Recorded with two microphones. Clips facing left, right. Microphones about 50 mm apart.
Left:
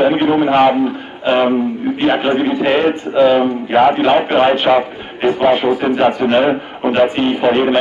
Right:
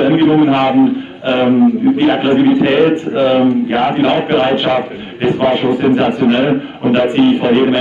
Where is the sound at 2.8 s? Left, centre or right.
Centre.